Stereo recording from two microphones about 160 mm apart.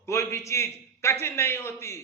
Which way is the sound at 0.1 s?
15° left (ahead or behind).